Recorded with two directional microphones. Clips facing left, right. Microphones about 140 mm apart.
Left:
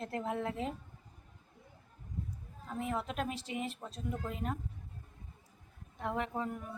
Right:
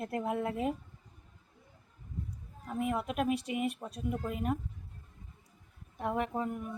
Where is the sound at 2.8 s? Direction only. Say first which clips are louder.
Right 4 dB; 10° right (ahead or behind).